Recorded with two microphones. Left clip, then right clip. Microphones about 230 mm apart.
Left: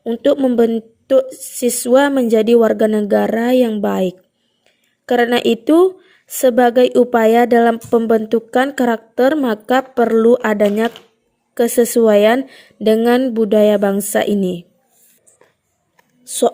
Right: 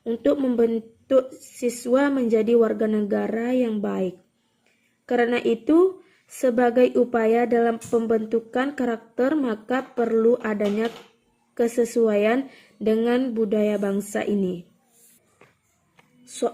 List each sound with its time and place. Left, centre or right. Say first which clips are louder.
0.0 s a woman's voice: left 8 dB; left